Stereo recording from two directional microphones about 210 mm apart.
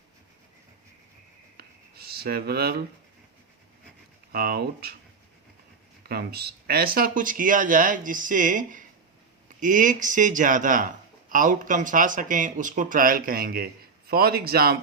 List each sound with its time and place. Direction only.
1.5 s a sound: 50° right (ahead or behind)
4.3 s speech: 45° right (ahead or behind)
6.0 s speech: 50° right (ahead or behind)